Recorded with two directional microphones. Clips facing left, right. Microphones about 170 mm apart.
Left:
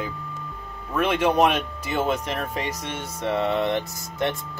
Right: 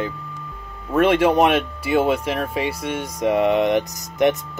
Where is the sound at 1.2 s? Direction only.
10° right (ahead or behind).